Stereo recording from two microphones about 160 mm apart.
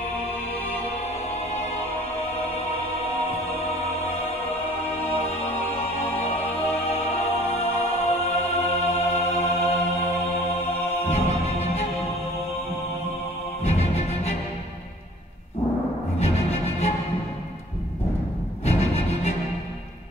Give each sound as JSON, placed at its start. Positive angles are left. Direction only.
{"t": 5.1, "sound": "music", "side_deg": 40}
{"t": 8.6, "sound": "music", "side_deg": 40}
{"t": 11.1, "sound": "music", "side_deg": 40}
{"t": 13.7, "sound": "music", "side_deg": 40}
{"t": 16.2, "sound": "music", "side_deg": 40}
{"t": 18.7, "sound": "music", "side_deg": 40}